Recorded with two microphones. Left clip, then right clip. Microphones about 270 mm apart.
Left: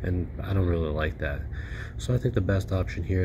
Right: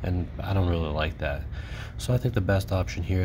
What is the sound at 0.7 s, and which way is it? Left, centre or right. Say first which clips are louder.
Speech: left 2 dB; right.